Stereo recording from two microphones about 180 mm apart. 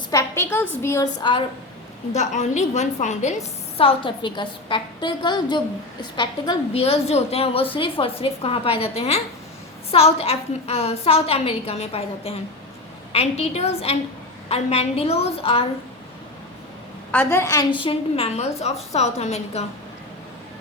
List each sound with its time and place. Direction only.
0.1 s a woman's voice: 15° left (ahead or behind)
1.2 s a woman's voice: 25° left (ahead or behind)
2.1 s a woman's voice: 40° left (ahead or behind)
3.8 s a woman's voice: 30° left (ahead or behind)
17.1 s a woman's voice: 10° left (ahead or behind); by 19.6 s 35° left (ahead or behind)